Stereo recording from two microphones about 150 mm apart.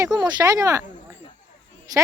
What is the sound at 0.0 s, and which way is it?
Speech, 25° right (ahead or behind).